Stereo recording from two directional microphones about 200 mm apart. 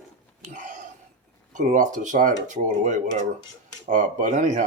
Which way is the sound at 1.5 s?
40° right (ahead or behind).